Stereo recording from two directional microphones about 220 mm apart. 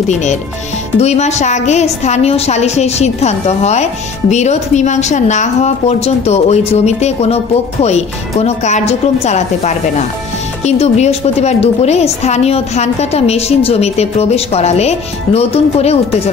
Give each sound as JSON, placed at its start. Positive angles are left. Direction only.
{"t": 0.9, "sound": "a woman's voice", "side_deg": 30}